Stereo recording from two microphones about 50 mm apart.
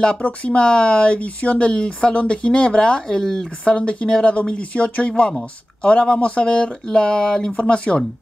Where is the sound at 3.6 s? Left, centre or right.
Left.